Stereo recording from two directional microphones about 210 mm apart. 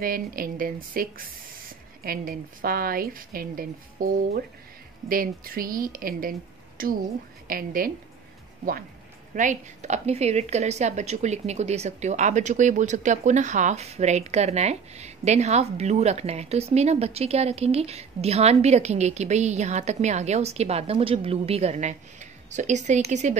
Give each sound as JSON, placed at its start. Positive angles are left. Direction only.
{"t": 0.0, "sound": "a woman's voice", "side_deg": -45}
{"t": 9.3, "sound": "a woman's voice", "side_deg": -35}